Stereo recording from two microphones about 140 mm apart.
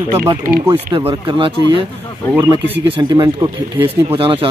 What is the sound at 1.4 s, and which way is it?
Speech, 35° right (ahead or behind).